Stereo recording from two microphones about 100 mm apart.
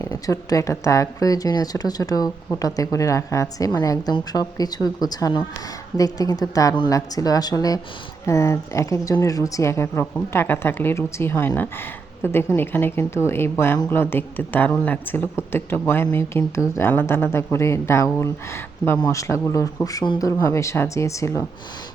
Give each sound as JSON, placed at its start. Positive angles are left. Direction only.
{"t": 0.0, "sound": "a woman's voice", "side_deg": 35}